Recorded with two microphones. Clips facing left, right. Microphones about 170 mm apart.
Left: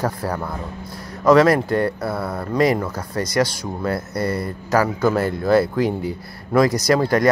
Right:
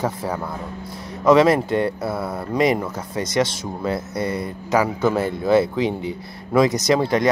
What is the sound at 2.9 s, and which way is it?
Speech, 20° right (ahead or behind).